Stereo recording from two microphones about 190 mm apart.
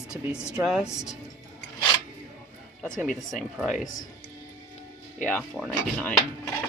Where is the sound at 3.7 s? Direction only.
40° left (ahead or behind).